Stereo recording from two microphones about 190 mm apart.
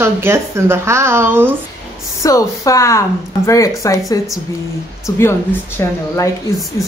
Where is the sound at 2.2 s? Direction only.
15° left (ahead or behind).